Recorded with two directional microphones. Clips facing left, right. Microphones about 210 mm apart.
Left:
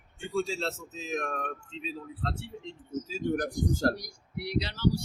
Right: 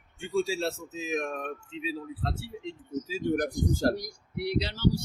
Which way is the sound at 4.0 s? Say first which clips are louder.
Right 5 dB; 25° right (ahead or behind).